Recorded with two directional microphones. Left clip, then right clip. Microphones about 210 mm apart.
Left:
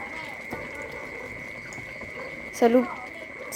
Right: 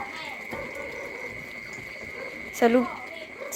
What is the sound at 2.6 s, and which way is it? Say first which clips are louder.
Speech: left 1 dB; 20° left (ahead or behind).